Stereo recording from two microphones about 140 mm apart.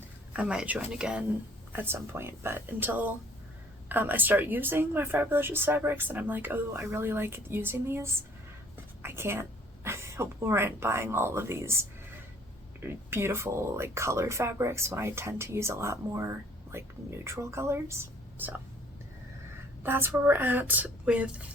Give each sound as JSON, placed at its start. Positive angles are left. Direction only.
{"t": 0.3, "sound": "a woman's voice", "side_deg": -10}
{"t": 19.8, "sound": "speech", "side_deg": -15}